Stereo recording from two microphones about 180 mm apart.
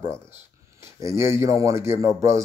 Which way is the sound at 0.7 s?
15° right (ahead or behind).